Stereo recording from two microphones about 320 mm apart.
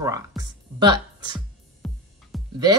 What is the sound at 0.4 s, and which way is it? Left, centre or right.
Music, centre.